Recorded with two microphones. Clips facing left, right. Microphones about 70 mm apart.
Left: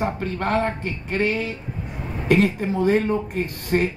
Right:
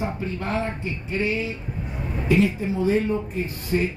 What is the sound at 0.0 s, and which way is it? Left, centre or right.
Speech, left.